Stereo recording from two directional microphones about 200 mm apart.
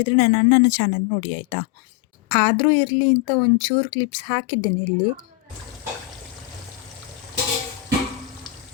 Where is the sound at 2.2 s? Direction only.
25° left (ahead or behind).